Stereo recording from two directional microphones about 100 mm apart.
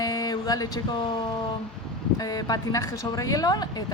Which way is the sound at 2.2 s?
40° left (ahead or behind).